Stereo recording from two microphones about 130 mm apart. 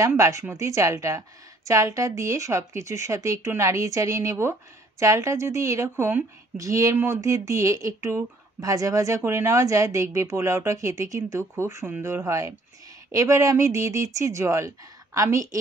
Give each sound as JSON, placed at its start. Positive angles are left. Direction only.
{"t": 0.2, "sound": "a woman's voice", "side_deg": -25}